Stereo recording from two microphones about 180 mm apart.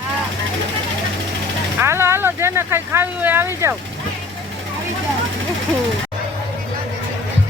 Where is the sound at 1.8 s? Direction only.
15° right (ahead or behind).